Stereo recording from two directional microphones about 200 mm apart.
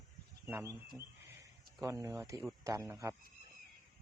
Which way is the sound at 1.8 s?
15° right (ahead or behind).